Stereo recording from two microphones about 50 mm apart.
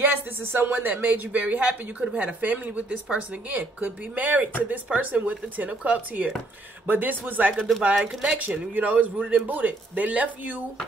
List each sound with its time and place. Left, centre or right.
0.0 s speech: right
8.1 s speech: centre
8.4 s speech: right